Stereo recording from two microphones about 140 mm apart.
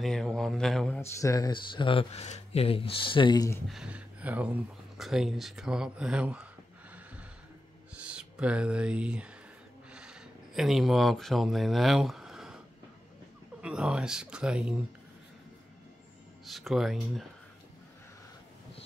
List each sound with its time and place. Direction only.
0.0 s speech: centre (ahead or behind)
1.0 s speech: 25° left (ahead or behind)
3.6 s speech: 5° right (ahead or behind)
7.9 s speech: 10° right (ahead or behind)
13.6 s speech: 5° right (ahead or behind)
16.4 s speech: centre (ahead or behind)